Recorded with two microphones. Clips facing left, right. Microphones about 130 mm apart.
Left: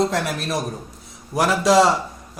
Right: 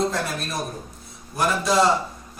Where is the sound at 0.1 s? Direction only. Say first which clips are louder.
Left 4 dB; 90° left.